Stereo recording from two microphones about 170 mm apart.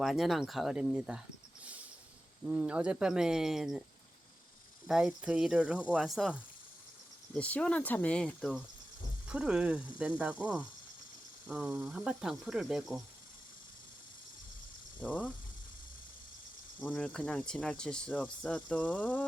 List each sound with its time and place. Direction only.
0.0 s speech: centre (ahead or behind)
2.5 s speech: 5° right (ahead or behind)
4.9 s speech: 5° right (ahead or behind)
7.3 s speech: 10° left (ahead or behind)
15.0 s speech: 10° left (ahead or behind)
16.8 s speech: 10° left (ahead or behind)